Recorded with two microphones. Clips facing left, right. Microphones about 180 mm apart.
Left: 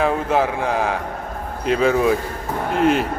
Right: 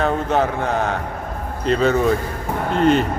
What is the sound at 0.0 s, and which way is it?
Speech, 5° left (ahead or behind).